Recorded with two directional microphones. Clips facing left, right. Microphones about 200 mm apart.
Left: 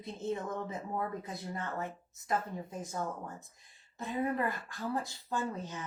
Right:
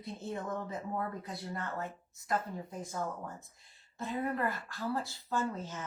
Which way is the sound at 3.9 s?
20° left (ahead or behind).